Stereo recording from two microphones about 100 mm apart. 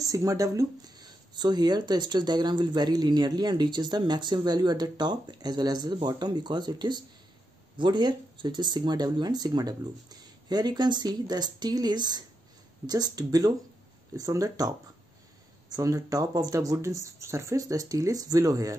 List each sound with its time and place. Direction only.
0.0 s speech: 35° right (ahead or behind)
15.7 s speech: 35° right (ahead or behind)